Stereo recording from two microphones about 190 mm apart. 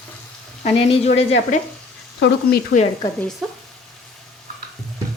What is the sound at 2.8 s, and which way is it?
Speech, 40° left (ahead or behind).